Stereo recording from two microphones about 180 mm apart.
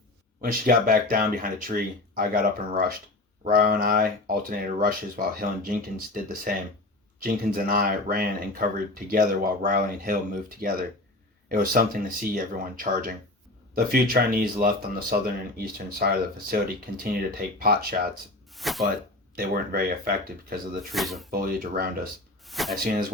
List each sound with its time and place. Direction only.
0.4 s speech: 50° right (ahead or behind)
18.5 s a sound: centre (ahead or behind)
19.4 s speech: 55° right (ahead or behind)
20.9 s speech: centre (ahead or behind)
21.2 s speech: 50° right (ahead or behind)
22.4 s a sound: centre (ahead or behind)